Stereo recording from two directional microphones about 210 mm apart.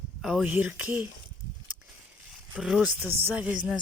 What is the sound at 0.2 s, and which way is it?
Speech, centre (ahead or behind).